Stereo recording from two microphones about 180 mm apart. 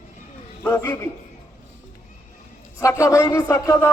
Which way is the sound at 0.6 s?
15° left (ahead or behind).